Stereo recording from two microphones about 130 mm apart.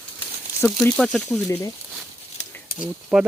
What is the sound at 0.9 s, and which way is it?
Speech, 5° left (ahead or behind).